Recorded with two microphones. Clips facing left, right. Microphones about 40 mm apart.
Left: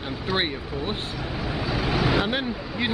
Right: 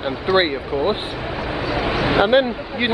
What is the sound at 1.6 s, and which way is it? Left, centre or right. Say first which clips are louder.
Vehicle: right 4 dB; right.